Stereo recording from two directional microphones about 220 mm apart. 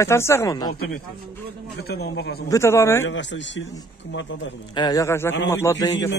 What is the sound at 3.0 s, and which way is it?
Speech, 55° left (ahead or behind).